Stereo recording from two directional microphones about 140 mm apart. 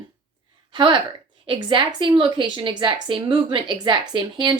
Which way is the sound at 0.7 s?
35° right (ahead or behind).